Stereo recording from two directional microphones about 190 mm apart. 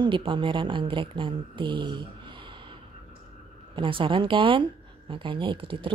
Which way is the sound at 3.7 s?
25° right (ahead or behind).